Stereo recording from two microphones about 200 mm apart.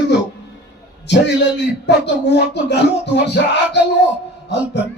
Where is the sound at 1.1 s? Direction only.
60° left (ahead or behind).